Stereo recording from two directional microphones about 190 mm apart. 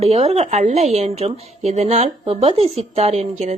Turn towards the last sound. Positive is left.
turn(degrees=-35)  # may be behind; listen again after turning